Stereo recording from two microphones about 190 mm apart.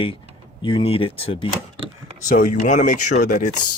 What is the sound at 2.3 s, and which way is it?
Speech, 45° left (ahead or behind).